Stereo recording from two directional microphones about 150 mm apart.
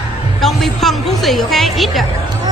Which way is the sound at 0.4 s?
Centre (ahead or behind).